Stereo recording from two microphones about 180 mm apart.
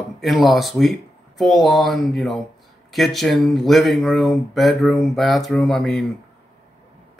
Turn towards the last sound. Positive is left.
turn(degrees=0)  # may be behind; listen again after turning